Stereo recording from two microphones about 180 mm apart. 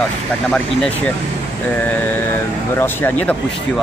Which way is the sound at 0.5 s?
5° left (ahead or behind).